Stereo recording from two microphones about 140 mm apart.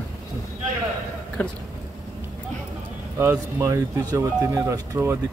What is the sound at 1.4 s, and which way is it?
Speech, 10° left (ahead or behind).